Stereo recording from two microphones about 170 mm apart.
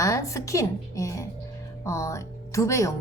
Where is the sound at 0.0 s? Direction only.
20° left (ahead or behind).